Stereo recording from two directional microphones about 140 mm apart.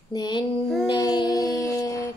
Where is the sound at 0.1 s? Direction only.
30° left (ahead or behind).